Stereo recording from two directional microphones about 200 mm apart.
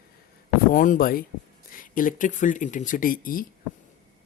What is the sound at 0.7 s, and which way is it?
Speech, 45° left (ahead or behind).